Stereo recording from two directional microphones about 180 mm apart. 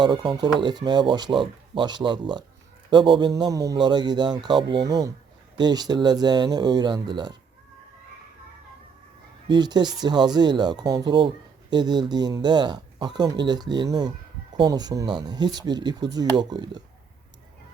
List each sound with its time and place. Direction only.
0.0 s speech: 25° right (ahead or behind)
9.5 s speech: 25° right (ahead or behind)